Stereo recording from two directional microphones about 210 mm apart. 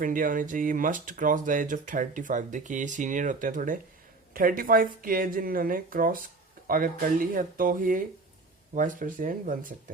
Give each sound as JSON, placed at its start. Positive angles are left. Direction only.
{"t": 0.0, "sound": "speech", "side_deg": -40}